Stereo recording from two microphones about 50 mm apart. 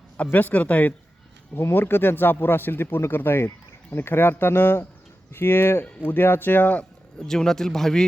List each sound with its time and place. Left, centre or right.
0.3 s speech: left
1.7 s speech: left
7.2 s speech: centre